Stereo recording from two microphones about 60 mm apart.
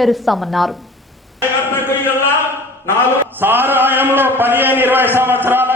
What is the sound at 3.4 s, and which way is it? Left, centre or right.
A man's voice, right.